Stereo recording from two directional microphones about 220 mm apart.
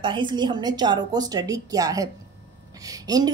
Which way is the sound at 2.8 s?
15° right (ahead or behind).